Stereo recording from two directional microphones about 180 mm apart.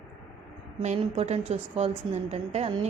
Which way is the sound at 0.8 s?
35° right (ahead or behind).